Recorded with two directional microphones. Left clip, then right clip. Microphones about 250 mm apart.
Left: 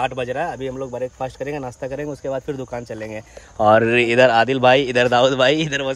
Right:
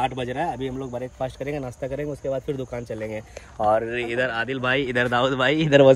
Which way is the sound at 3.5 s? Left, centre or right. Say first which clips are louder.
Left 7 dB; left.